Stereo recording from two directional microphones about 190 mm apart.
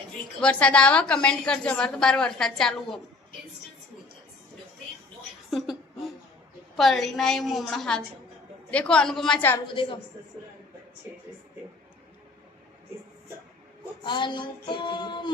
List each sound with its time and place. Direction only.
0.4 s a woman's voice: 5° left (ahead or behind)
5.5 s a sound: centre (ahead or behind)
6.7 s a woman's voice: centre (ahead or behind)
9.6 s child singing: 25° left (ahead or behind)
14.0 s child singing: 25° left (ahead or behind)